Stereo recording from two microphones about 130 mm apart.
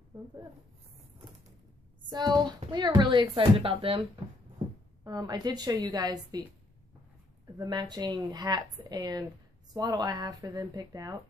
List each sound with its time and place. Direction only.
0.1 s speech: 35° right (ahead or behind)
2.0 s speech: 30° right (ahead or behind)
5.0 s speech: 30° right (ahead or behind)
7.5 s speech: 35° right (ahead or behind)